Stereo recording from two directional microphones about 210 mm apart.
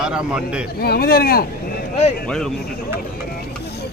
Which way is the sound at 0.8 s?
45° left (ahead or behind).